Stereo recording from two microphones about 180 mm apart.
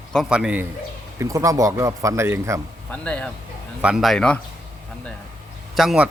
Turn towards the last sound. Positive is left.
turn(degrees=0)  # may be behind; listen again after turning